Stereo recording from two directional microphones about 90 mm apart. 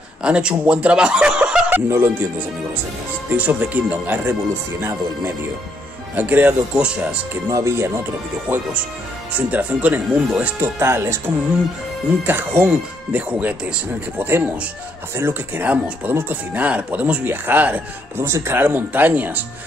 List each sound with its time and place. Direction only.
0.2 s speech: 10° right (ahead or behind)
1.9 s speech: 25° right (ahead or behind)
3.3 s speech: 15° right (ahead or behind)
7.5 s speech: 30° right (ahead or behind)
8.5 s speech: 20° right (ahead or behind)
10.6 s speech: 25° right (ahead or behind)